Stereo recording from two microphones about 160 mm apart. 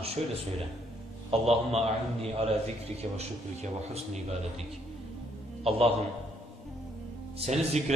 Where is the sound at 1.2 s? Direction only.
40° right (ahead or behind).